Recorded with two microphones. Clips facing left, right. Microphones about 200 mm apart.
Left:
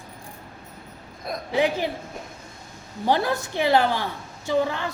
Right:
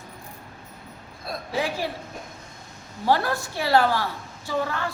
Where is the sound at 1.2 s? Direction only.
20° left (ahead or behind).